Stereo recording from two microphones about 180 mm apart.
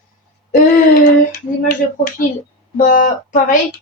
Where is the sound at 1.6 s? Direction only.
50° left (ahead or behind).